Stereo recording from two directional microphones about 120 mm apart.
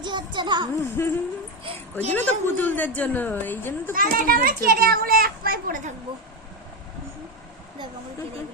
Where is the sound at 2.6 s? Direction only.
15° left (ahead or behind).